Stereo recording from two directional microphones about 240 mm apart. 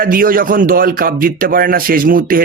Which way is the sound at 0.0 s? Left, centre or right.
Right.